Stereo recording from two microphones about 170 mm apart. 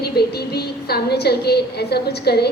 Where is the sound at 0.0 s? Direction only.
70° left (ahead or behind).